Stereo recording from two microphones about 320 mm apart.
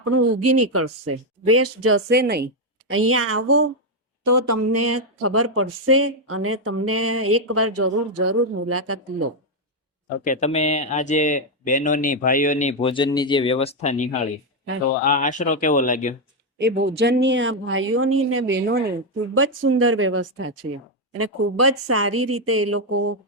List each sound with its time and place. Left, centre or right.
0.0 s speech: right
2.0 s speech: right
2.9 s speech: right
4.3 s speech: right
10.2 s speech: left
15.0 s speech: left
16.6 s speech: right